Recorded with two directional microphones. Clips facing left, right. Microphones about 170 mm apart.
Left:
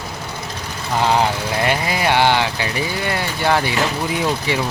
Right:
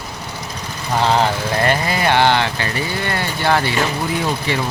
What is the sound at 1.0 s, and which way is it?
Speech, 10° left (ahead or behind).